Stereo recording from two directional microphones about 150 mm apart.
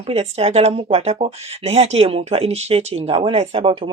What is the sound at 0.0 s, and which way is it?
Speech, 45° right (ahead or behind).